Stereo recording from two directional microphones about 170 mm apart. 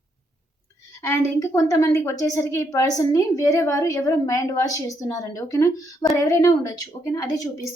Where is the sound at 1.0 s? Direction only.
20° left (ahead or behind).